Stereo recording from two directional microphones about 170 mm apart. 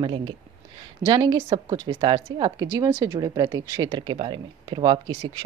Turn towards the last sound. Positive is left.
turn(degrees=-30)  # may be behind; listen again after turning